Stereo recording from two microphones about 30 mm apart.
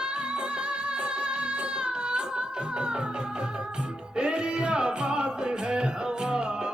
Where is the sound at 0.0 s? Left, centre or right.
Right.